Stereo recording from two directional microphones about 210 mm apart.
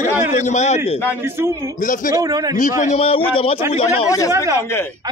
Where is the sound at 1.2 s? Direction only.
10° right (ahead or behind).